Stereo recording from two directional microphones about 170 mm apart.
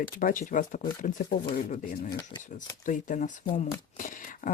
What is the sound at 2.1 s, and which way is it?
Speech, 25° left (ahead or behind).